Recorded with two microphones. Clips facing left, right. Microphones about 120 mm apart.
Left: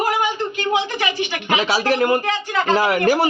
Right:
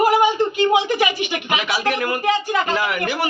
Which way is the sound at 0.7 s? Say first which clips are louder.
Right 3 dB; 15° right (ahead or behind).